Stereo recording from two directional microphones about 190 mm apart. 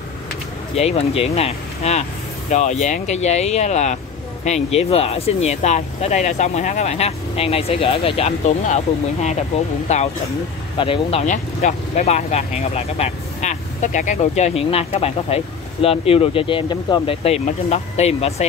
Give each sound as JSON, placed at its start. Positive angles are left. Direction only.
{"t": 0.7, "sound": "speech", "side_deg": 35}